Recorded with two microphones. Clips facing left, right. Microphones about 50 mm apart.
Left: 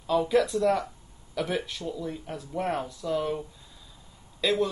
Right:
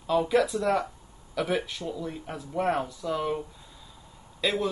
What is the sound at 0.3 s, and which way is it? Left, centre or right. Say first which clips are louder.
Speech: left 2 dB; centre.